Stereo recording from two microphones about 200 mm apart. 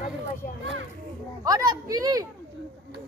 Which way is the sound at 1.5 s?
20° right (ahead or behind).